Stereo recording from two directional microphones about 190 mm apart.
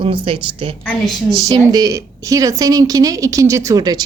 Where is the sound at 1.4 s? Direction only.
20° right (ahead or behind).